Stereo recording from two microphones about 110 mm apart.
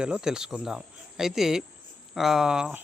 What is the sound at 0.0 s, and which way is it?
Speech, 5° right (ahead or behind).